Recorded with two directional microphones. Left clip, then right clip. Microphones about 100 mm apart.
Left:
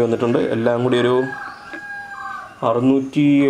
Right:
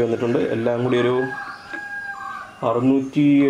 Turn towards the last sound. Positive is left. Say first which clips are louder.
# left 1 dB
turn(degrees=25)  # may be behind; listen again after turning